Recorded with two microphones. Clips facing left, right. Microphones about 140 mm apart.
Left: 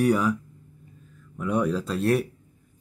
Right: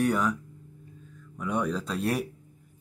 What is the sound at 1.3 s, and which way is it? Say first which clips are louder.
Speech: left 4 dB; 5° left (ahead or behind).